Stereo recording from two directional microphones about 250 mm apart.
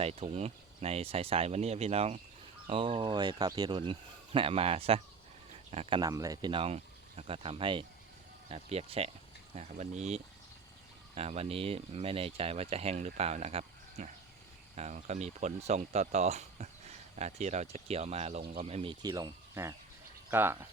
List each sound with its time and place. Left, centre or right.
0.0 s speech: right